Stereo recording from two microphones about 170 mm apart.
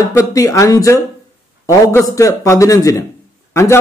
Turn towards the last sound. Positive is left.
turn(degrees=15)  # may be behind; listen again after turning